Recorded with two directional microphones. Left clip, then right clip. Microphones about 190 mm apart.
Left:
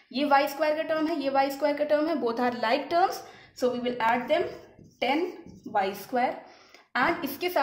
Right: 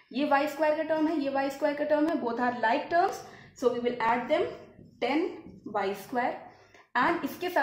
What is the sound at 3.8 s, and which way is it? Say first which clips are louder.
Speech: left 1 dB; 10° left (ahead or behind).